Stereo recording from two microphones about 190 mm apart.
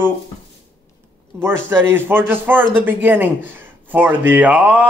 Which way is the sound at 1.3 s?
10° right (ahead or behind).